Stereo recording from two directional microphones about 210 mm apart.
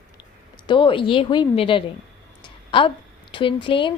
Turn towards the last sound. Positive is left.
turn(degrees=25)  # may be behind; listen again after turning